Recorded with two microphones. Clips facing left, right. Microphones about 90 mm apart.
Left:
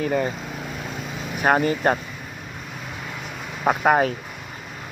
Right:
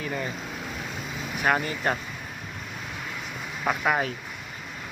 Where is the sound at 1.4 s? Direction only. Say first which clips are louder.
Left 6 dB; 40° left (ahead or behind).